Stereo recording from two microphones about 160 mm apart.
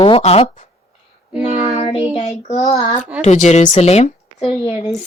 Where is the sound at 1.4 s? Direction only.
40° left (ahead or behind).